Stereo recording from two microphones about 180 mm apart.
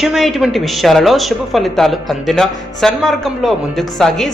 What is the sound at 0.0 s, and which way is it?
A woman's voice, centre (ahead or behind).